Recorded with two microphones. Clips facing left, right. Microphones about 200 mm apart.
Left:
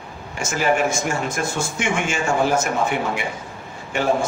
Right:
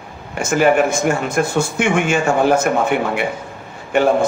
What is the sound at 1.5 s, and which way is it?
A man's voice, 60° right (ahead or behind).